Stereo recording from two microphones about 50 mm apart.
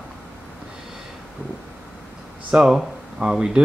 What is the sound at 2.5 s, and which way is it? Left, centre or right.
Speech, centre.